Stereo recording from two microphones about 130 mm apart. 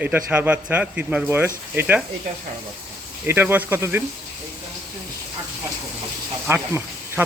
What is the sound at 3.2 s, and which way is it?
Speech, 15° right (ahead or behind).